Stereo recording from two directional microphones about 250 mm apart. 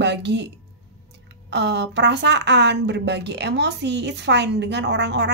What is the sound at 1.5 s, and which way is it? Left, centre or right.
A woman's voice, right.